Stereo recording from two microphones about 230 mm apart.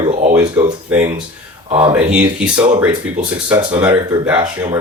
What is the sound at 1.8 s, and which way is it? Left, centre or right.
Speech, centre.